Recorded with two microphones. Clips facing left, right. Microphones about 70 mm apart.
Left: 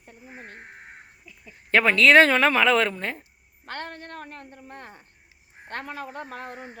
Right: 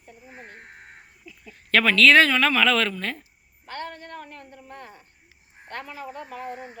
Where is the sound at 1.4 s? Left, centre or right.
Left.